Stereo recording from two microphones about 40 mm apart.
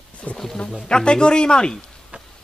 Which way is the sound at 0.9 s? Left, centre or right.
Left.